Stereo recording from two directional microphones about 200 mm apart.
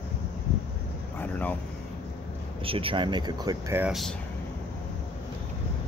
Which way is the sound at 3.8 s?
Centre (ahead or behind).